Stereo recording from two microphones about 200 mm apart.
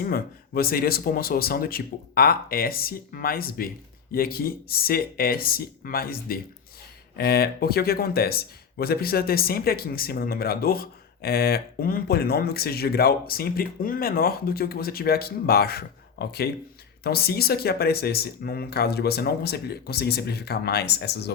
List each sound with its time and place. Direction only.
0.0 s speech: 50° left (ahead or behind)